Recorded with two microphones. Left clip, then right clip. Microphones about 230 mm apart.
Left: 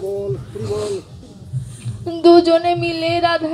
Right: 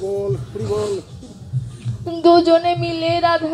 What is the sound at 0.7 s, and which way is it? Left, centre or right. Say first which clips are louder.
Music: right 1 dB; left.